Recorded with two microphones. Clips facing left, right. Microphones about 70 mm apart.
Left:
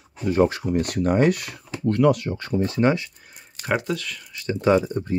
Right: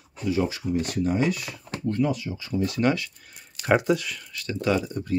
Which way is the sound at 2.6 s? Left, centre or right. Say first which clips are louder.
Left 3 dB; left.